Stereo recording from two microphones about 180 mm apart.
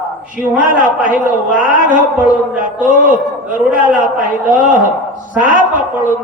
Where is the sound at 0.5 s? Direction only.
50° right (ahead or behind).